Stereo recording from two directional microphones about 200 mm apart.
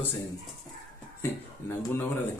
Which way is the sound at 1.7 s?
10° left (ahead or behind).